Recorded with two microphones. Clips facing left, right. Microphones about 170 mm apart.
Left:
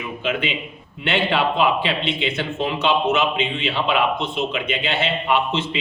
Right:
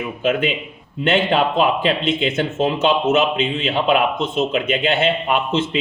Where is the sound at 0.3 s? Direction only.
50° right (ahead or behind).